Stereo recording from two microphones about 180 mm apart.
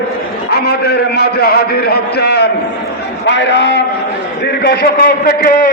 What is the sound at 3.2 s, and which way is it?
Speech, 90° left.